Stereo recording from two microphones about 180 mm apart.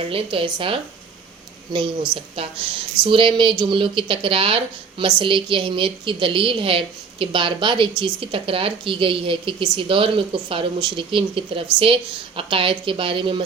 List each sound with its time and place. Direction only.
0.0 s speech: 30° right (ahead or behind)
2.1 s speech: 30° right (ahead or behind)